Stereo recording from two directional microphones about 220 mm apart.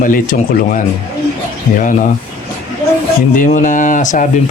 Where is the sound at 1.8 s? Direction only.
35° left (ahead or behind).